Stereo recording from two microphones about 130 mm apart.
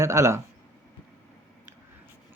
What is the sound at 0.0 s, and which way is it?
Speech, 20° right (ahead or behind).